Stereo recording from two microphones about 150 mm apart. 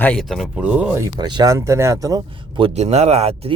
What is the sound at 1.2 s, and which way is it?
Speech, 30° right (ahead or behind).